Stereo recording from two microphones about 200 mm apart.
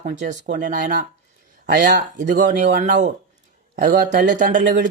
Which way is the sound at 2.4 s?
35° right (ahead or behind).